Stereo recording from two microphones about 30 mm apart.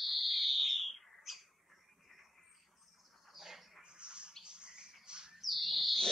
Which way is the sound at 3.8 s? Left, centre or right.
Right.